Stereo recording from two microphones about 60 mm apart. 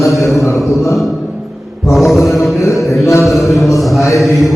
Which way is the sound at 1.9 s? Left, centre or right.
Centre.